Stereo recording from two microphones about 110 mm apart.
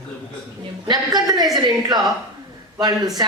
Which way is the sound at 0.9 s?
40° right (ahead or behind).